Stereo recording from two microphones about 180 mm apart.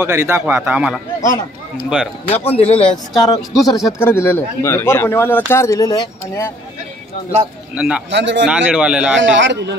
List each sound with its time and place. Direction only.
0.0 s a man's voice: 15° right (ahead or behind)
2.2 s speech: 35° left (ahead or behind)
3.3 s speech: 20° left (ahead or behind)
7.7 s a man's voice: 5° right (ahead or behind)
8.1 s speech: 80° right
8.5 s a man's voice: 5° right (ahead or behind)
9.2 s speech: 85° right